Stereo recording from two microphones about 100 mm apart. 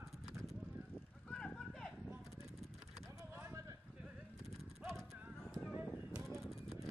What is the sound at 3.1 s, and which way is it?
Clip-clop, 25° right (ahead or behind).